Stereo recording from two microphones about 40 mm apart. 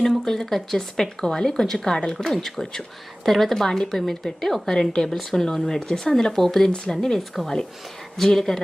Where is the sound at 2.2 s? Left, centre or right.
Centre.